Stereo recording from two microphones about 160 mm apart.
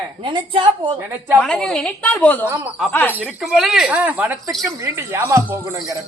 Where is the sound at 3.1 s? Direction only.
5° right (ahead or behind).